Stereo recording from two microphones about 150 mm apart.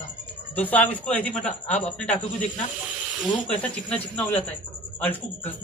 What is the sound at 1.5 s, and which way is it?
Speech, 50° left (ahead or behind).